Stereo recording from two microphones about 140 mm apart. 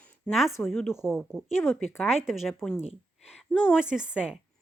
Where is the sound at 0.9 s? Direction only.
15° left (ahead or behind); by 2.5 s centre (ahead or behind).